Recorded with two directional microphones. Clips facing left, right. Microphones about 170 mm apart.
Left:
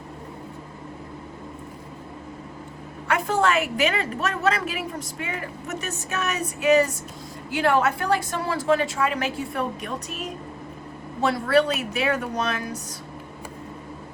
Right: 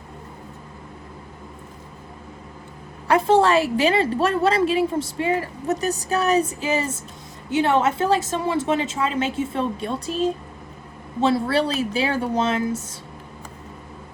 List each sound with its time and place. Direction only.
3.1 s a woman's voice: 30° right (ahead or behind)